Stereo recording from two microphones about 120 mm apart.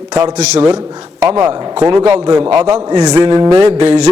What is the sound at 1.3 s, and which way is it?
Speech, 20° right (ahead or behind).